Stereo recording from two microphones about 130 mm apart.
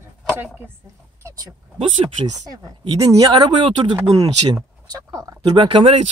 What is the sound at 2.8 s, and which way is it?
Speech, 30° right (ahead or behind).